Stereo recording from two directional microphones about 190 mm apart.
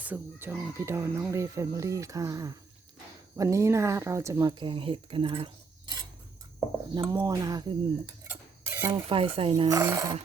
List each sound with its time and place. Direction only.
0.0 s speech: 10° right (ahead or behind)
8.9 s dishes: 30° right (ahead or behind)